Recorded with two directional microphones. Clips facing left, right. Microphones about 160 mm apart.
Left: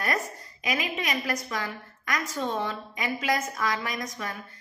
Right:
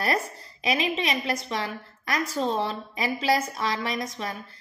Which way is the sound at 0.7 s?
25° right (ahead or behind).